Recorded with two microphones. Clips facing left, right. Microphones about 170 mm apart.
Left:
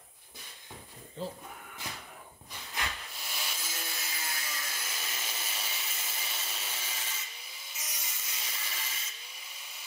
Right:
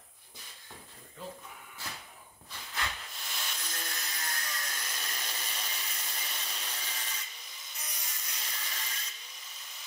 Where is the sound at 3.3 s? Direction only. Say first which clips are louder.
Even; 5° left (ahead or behind).